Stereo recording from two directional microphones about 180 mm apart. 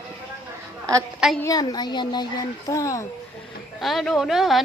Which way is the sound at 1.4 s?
20° left (ahead or behind).